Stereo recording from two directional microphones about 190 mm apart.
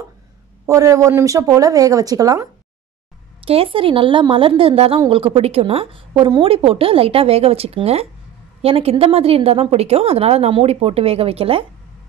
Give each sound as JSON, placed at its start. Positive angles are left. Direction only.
{"t": 0.7, "sound": "speech", "side_deg": -15}
{"t": 3.4, "sound": "a woman's voice", "side_deg": -30}